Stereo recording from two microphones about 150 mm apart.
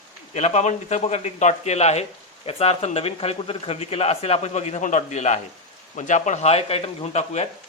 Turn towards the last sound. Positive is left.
turn(degrees=45)  # may be behind; listen again after turning